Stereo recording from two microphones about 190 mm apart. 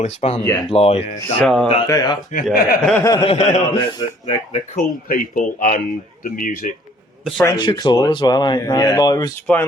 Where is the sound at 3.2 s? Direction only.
35° left (ahead or behind).